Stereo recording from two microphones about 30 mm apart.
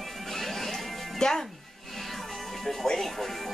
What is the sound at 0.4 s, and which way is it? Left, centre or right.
Music, centre.